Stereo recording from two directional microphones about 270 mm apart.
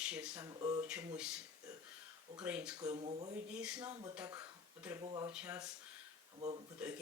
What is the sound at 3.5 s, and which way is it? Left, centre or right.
Speech, centre.